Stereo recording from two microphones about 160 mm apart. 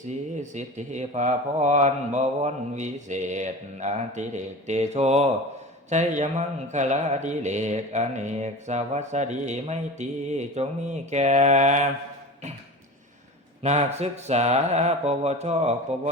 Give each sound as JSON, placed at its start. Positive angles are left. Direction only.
{"t": 0.3, "sound": "speech", "side_deg": -50}
{"t": 13.6, "sound": "speech", "side_deg": -40}